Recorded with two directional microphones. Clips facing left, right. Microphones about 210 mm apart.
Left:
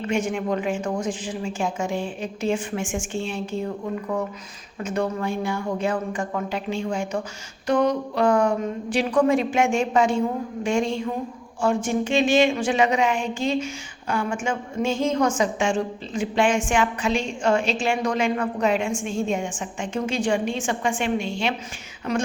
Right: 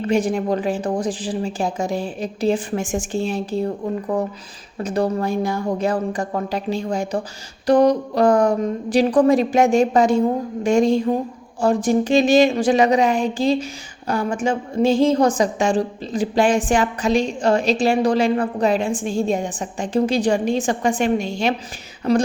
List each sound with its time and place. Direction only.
0.0 s a woman's voice: 35° right (ahead or behind)